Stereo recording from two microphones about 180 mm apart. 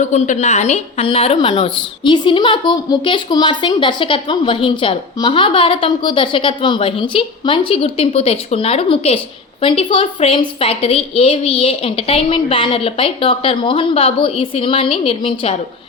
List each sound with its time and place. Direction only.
0.0 s a woman's voice: 40° left (ahead or behind)